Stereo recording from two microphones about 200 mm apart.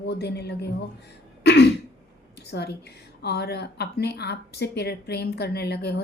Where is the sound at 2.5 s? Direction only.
55° left (ahead or behind).